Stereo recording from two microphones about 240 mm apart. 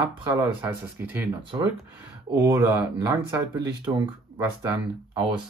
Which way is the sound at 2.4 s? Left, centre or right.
Centre.